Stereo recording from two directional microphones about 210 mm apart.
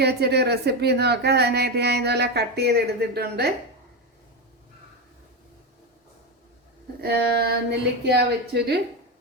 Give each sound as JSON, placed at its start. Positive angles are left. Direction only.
{"t": 0.0, "sound": "speech", "side_deg": -50}
{"t": 7.0, "sound": "speech", "side_deg": -50}